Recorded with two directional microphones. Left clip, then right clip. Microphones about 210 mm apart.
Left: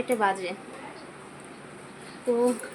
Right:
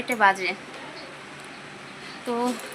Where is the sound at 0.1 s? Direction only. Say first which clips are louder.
Right 6 dB; 5° left (ahead or behind).